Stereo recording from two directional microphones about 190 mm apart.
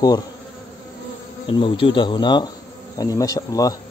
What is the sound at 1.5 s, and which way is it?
Speech, 25° left (ahead or behind).